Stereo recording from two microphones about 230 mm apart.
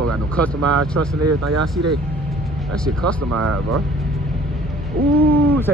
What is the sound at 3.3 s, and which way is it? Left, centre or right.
Speech, right.